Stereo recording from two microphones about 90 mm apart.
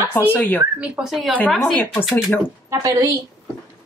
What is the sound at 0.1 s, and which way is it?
Speech, 20° left (ahead or behind).